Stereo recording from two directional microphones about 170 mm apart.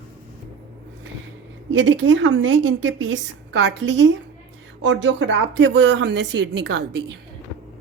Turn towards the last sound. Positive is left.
turn(degrees=-90)